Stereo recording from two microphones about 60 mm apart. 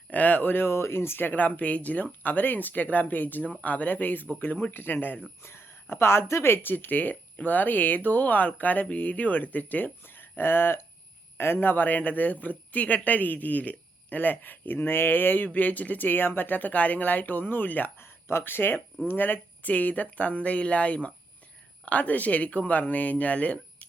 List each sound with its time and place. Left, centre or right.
0.1 s a woman's voice: left
5.4 s a woman's voice: left